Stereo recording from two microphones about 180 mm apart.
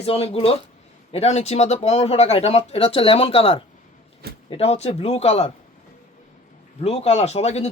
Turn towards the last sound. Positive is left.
turn(degrees=35)  # may be behind; listen again after turning